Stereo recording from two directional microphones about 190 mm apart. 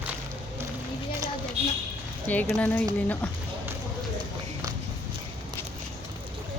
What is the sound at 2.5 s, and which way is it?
Speech, 5° left (ahead or behind).